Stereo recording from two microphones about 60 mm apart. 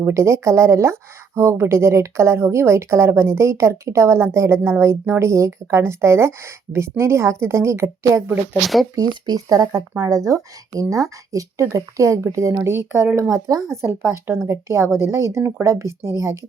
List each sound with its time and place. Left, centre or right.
0.1 s speech: right
8.6 s speech: centre
9.0 s speech: right
12.5 s speech: right
13.3 s speech: right
13.8 s speech: right